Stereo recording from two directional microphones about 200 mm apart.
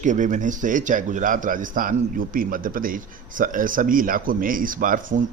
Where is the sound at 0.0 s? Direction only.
40° right (ahead or behind).